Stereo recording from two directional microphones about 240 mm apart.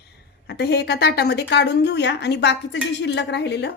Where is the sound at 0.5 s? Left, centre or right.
Left.